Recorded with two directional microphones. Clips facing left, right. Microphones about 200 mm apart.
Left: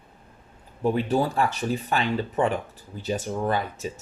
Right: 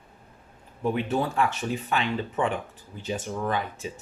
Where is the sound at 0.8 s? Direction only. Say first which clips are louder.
Left 3 dB; 35° left (ahead or behind).